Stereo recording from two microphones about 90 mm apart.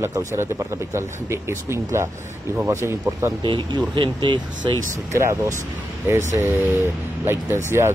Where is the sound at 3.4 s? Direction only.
60° right (ahead or behind).